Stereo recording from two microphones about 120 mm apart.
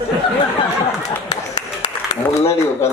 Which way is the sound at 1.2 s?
75° left (ahead or behind).